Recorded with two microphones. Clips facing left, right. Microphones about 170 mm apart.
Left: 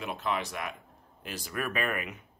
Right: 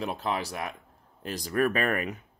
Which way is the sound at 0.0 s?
35° right (ahead or behind).